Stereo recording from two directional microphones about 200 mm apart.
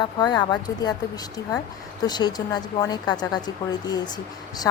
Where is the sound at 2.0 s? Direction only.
20° left (ahead or behind).